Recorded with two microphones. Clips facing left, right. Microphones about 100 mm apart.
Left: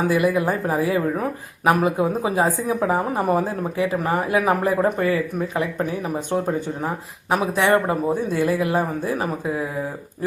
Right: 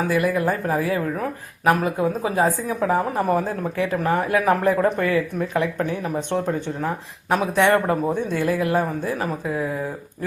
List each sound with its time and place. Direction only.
0.1 s speech: 15° left (ahead or behind)